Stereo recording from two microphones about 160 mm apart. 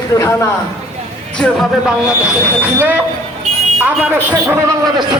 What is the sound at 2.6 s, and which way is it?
Speech, 10° right (ahead or behind).